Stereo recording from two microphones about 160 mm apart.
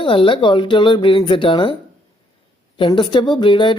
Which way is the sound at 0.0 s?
30° left (ahead or behind).